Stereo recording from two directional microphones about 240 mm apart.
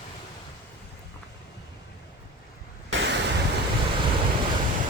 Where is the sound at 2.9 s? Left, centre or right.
Right.